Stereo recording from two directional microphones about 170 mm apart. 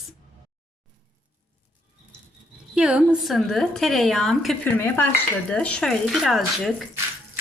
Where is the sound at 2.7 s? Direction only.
5° right (ahead or behind).